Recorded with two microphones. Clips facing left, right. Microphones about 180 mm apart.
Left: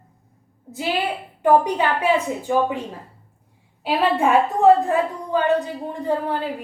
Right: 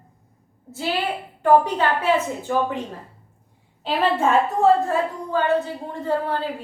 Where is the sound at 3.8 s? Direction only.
10° left (ahead or behind).